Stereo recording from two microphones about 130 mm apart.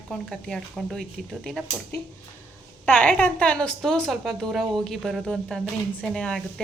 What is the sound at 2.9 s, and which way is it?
A woman's voice, 10° left (ahead or behind).